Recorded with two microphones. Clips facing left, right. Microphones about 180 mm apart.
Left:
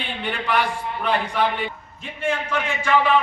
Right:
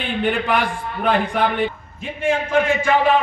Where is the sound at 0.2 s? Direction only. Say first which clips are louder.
Right 3 dB; 50° right (ahead or behind).